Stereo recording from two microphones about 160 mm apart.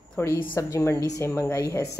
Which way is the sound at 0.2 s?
15° left (ahead or behind).